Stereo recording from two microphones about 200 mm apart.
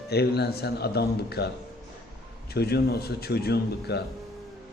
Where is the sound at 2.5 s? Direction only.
55° left (ahead or behind).